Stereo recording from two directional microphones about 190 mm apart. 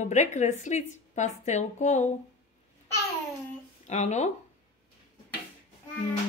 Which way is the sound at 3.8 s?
35° left (ahead or behind).